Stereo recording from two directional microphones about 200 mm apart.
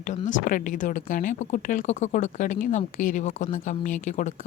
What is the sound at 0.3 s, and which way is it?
A woman's voice, 40° left (ahead or behind).